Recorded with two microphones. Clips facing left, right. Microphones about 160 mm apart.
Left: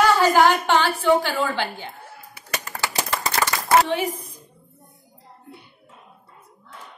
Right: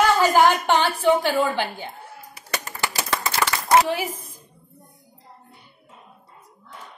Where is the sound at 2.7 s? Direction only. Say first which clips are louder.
Even; 75° left (ahead or behind).